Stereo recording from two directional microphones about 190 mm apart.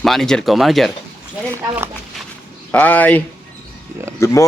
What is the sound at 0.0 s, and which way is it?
Speech, centre (ahead or behind).